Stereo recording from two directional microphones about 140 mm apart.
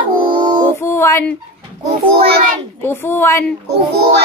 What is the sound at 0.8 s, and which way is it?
Child singing, 20° left (ahead or behind).